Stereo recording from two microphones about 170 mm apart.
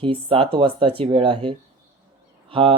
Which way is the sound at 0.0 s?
30° right (ahead or behind).